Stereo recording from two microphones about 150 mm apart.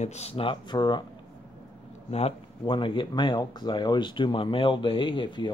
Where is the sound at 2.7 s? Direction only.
35° left (ahead or behind).